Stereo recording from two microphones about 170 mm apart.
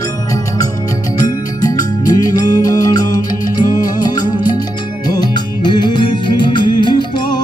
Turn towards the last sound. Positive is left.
turn(degrees=25)  # may be behind; listen again after turning